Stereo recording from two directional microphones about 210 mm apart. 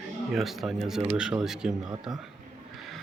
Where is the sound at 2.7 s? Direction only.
Centre (ahead or behind).